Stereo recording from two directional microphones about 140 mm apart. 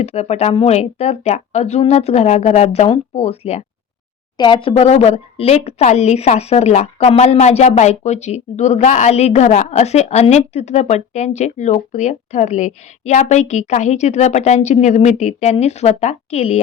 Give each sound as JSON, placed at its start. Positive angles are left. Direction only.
{"t": 0.0, "sound": "a woman's voice", "side_deg": 50}
{"t": 4.4, "sound": "a woman's voice", "side_deg": 35}